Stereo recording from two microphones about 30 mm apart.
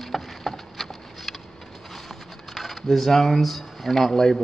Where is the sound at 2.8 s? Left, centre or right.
Centre.